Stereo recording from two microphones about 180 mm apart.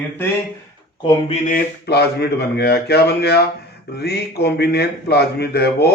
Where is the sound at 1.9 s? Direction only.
65° left (ahead or behind).